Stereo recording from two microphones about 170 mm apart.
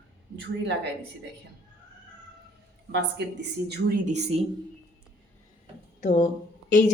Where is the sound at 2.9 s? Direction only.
80° right.